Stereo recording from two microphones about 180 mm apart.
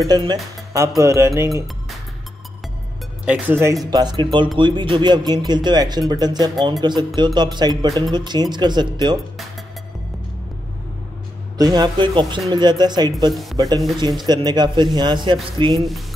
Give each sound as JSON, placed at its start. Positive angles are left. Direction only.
{"t": 0.0, "sound": "speech", "side_deg": -25}
{"t": 3.3, "sound": "speech", "side_deg": -10}
{"t": 11.5, "sound": "speech", "side_deg": -20}
{"t": 13.3, "sound": "speech", "side_deg": 0}
{"t": 13.6, "sound": "speech", "side_deg": -20}